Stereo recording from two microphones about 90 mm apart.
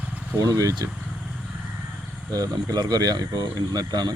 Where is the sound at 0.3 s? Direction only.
40° right (ahead or behind).